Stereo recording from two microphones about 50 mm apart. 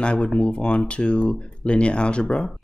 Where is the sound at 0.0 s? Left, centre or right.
Left.